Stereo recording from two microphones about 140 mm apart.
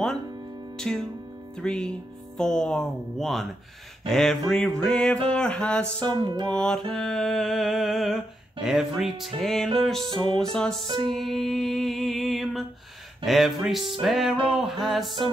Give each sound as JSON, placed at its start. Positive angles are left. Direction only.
{"t": 0.7, "sound": "music", "side_deg": 5}
{"t": 2.3, "sound": "a sound", "side_deg": 5}
{"t": 4.5, "sound": "music", "side_deg": 5}
{"t": 6.0, "sound": "music", "side_deg": -30}
{"t": 6.5, "sound": "music", "side_deg": 5}
{"t": 6.9, "sound": "a sound", "side_deg": 0}